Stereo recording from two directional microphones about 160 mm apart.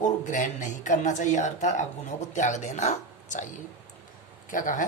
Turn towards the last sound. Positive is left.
turn(degrees=55)  # may be behind; listen again after turning